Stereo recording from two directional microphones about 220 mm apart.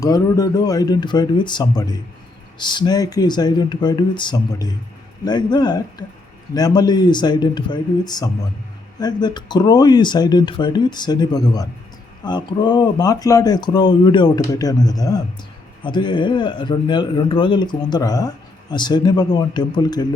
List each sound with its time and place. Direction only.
0.0 s speech: 15° left (ahead or behind)